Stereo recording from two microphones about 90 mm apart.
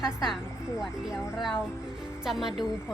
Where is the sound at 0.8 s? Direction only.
5° right (ahead or behind).